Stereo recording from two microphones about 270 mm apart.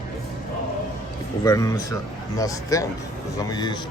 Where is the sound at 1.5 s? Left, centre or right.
Centre.